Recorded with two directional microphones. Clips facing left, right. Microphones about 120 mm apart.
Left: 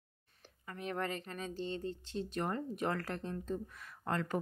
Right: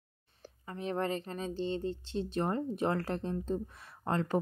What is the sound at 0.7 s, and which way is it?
Speech, 30° right (ahead or behind).